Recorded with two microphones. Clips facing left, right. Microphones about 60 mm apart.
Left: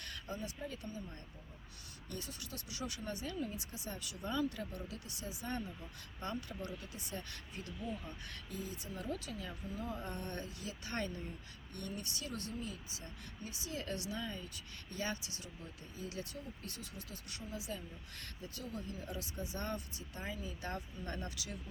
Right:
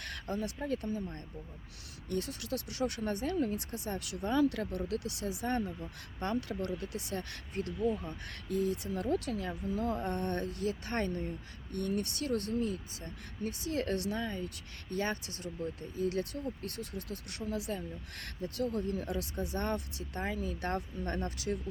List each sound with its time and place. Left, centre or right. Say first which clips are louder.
0.0 s speech: right 7 dB; right
2.0 s speech: right 11 dB; right
6.3 s speech: right 8 dB; right
9.7 s a sound: right 9 dB; right
10.0 s speech: right 9 dB; right